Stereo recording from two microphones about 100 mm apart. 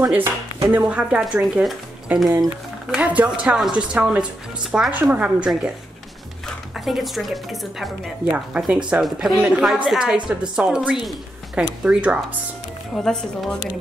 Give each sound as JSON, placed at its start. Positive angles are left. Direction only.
{"t": 0.7, "sound": "a woman's voice", "side_deg": -15}
{"t": 2.2, "sound": "speech", "side_deg": -35}
{"t": 2.9, "sound": "a woman's voice", "side_deg": -15}
{"t": 4.9, "sound": "a woman's voice", "side_deg": -15}
{"t": 6.8, "sound": "a woman's voice", "side_deg": 0}
{"t": 12.9, "sound": "speech", "side_deg": 5}